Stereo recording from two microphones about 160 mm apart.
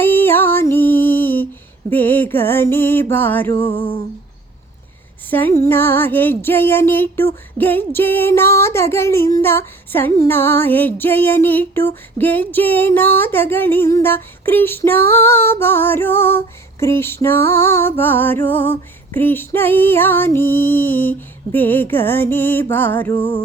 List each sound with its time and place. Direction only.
0.0 s music: 10° left (ahead or behind)
1.9 s female singing: 10° left (ahead or behind)
3.7 s a sound: 30° left (ahead or behind)
5.3 s female singing: 15° left (ahead or behind)